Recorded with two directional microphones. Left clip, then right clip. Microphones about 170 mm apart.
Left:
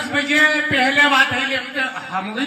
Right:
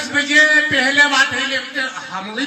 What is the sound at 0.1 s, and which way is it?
A man's voice, 15° left (ahead or behind).